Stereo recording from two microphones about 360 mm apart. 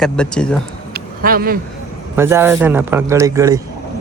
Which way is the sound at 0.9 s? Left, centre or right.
Right.